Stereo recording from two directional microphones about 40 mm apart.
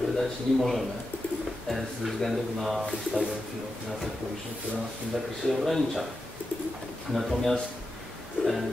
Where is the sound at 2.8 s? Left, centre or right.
Centre.